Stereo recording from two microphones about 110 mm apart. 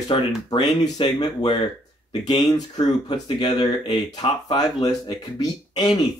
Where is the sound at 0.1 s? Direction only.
50° left (ahead or behind).